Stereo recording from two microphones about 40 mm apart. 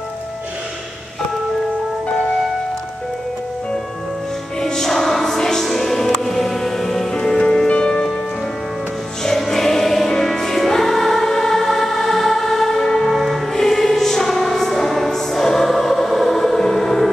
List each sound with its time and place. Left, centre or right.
4.6 s music: centre
7.6 s music: left
7.9 s music: centre
9.2 s music: centre
13.1 s music: centre
15.0 s choir: centre